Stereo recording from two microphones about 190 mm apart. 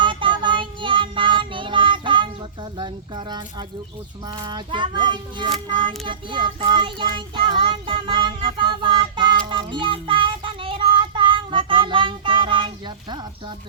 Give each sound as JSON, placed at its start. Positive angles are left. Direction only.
{"t": 0.0, "sound": "child singing", "side_deg": -25}
{"t": 2.7, "sound": "speech", "side_deg": -25}
{"t": 4.3, "sound": "child singing", "side_deg": -25}